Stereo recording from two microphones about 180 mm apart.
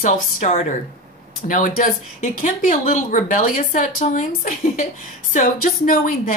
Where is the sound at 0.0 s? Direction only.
40° left (ahead or behind).